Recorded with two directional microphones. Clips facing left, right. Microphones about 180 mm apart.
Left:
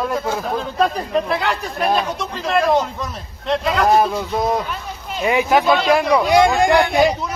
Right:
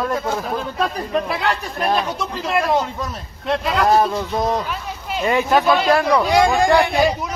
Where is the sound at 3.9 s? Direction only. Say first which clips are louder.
Left 1 dB; 10° left (ahead or behind).